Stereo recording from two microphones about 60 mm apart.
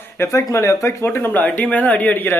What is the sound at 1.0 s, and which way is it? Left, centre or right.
Speech, left.